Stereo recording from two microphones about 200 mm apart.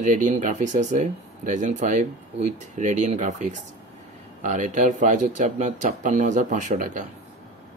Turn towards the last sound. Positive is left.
turn(degrees=-40)  # may be behind; listen again after turning